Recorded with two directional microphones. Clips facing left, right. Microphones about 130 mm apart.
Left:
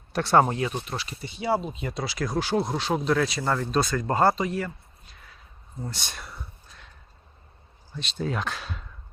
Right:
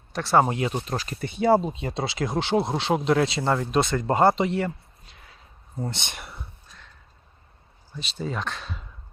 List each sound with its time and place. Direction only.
0.1 s speech: centre (ahead or behind)
0.4 s speech: 15° right (ahead or behind)
0.9 s speech: 45° right (ahead or behind)
1.7 s speech: 30° right (ahead or behind)
7.9 s speech: centre (ahead or behind)